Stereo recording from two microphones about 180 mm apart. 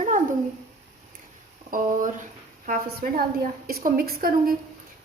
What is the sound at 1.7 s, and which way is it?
A woman's voice, 45° right (ahead or behind).